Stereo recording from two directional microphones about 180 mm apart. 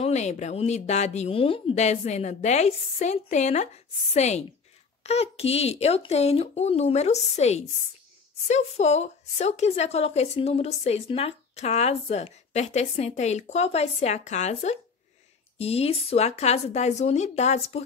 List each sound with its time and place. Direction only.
0.0 s a woman's voice: 40° left (ahead or behind)